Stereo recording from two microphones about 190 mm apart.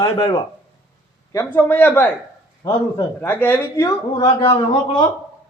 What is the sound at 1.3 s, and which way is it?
Speech, 10° left (ahead or behind).